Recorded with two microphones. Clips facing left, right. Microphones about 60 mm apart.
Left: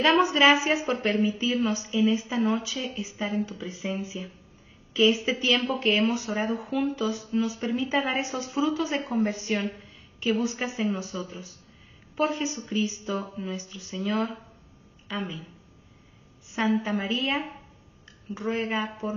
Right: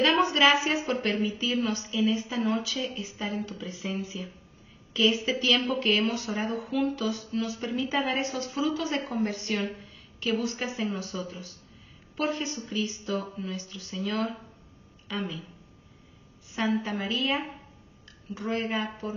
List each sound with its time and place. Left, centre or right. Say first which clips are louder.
0.2 s a woman's voice: left 2 dB; centre
16.4 s a woman's voice: left 3 dB; centre